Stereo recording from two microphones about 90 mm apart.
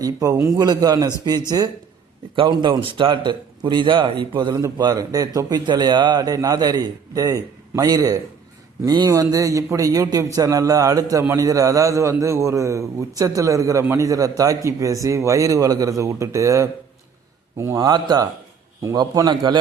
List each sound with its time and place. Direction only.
0.0 s a man's voice: 40° right (ahead or behind)
0.7 s a man's voice: 45° right (ahead or behind)
2.3 s speech: 65° right (ahead or behind)
3.6 s a man's voice: 60° right (ahead or behind)
4.8 s a man's voice: 45° right (ahead or behind)
11.2 s a man's voice: 30° right (ahead or behind)
11.4 s a man's voice: 40° right (ahead or behind)
17.7 s a man's voice: 45° right (ahead or behind)